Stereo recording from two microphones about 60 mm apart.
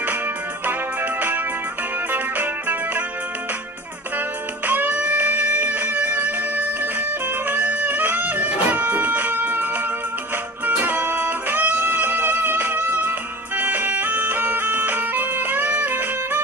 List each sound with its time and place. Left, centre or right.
2.1 s music: right
4.6 s music: right
10.7 s music: right